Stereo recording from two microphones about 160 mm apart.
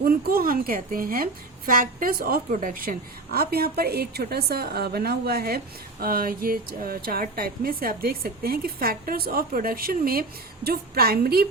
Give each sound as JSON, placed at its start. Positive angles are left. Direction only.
{"t": 0.0, "sound": "a woman's voice", "side_deg": -70}
{"t": 3.3, "sound": "speech", "side_deg": -75}